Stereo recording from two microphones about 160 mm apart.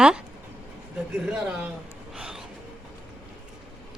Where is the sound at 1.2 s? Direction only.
5° right (ahead or behind).